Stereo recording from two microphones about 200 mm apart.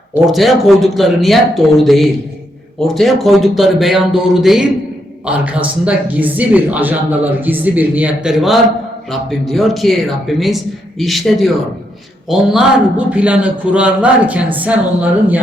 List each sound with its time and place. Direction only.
0.2 s speech: centre (ahead or behind)